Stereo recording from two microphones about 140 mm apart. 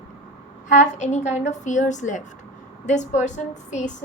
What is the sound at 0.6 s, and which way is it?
A woman's voice, 60° left (ahead or behind).